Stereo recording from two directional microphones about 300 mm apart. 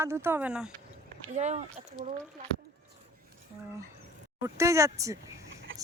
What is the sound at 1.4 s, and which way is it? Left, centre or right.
Speech, right.